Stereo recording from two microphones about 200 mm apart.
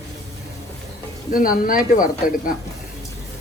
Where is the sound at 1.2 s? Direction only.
45° left (ahead or behind).